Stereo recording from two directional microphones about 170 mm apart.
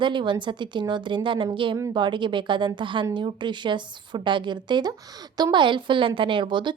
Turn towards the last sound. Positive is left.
turn(degrees=-30)  # may be behind; listen again after turning